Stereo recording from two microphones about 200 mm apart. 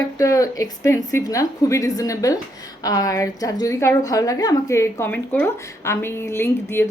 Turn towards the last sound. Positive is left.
turn(degrees=10)  # may be behind; listen again after turning